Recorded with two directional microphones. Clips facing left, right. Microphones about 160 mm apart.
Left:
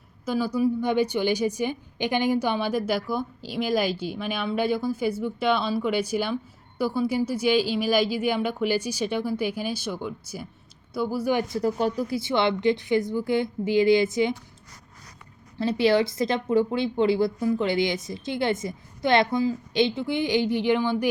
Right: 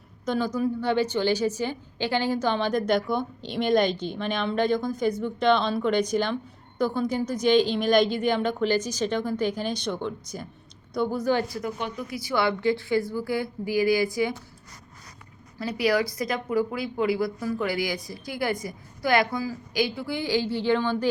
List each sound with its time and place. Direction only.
0.3 s a woman's voice: 10° left (ahead or behind)
11.5 s speech: 35° left (ahead or behind)
15.5 s speech: 25° left (ahead or behind)